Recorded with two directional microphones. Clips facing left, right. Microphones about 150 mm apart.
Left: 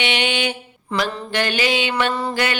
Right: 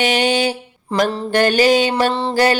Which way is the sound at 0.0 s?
40° right (ahead or behind).